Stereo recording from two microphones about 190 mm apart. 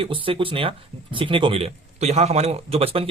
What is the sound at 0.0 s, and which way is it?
Speech, 30° right (ahead or behind).